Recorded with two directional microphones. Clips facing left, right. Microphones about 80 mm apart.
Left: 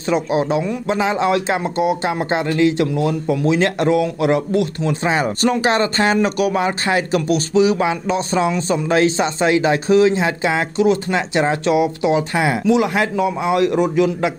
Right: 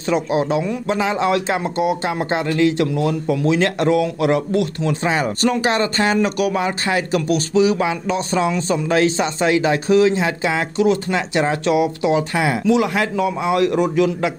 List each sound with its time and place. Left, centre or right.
0.0 s a man's voice: centre